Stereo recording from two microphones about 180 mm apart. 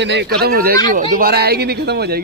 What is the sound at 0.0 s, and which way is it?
A man's voice, 70° right (ahead or behind).